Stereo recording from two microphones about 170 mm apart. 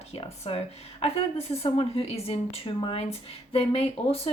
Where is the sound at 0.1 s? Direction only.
35° left (ahead or behind).